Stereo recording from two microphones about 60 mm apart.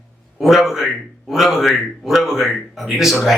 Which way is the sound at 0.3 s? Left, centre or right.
Centre.